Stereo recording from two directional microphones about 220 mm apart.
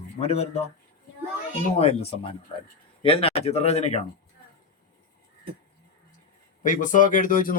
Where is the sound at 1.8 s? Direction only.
25° left (ahead or behind).